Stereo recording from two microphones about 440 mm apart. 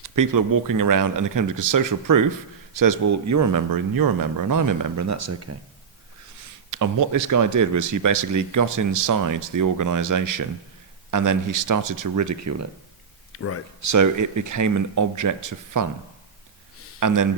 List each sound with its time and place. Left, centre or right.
0.0 s speech: right
6.7 s speech: right
13.3 s speech: left
13.8 s speech: right
17.0 s speech: right